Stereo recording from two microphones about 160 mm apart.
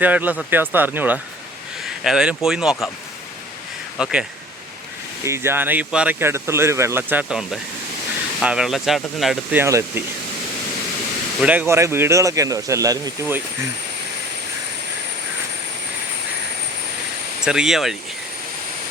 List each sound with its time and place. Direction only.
0.0 s speech: 10° right (ahead or behind)
3.9 s speech: 5° right (ahead or behind)
5.2 s speech: 15° right (ahead or behind); by 9.6 s centre (ahead or behind)
9.6 s speech: 15° right (ahead or behind)
11.3 s speech: 10° right (ahead or behind)
17.4 s speech: 5° right (ahead or behind)